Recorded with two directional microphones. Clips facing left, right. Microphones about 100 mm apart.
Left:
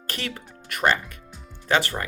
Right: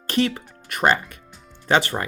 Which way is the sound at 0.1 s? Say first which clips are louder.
Right 11 dB; 25° right (ahead or behind).